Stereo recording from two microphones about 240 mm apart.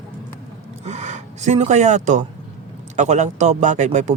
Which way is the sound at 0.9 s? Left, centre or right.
Right.